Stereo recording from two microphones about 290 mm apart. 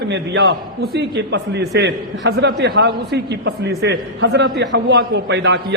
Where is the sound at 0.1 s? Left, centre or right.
Right.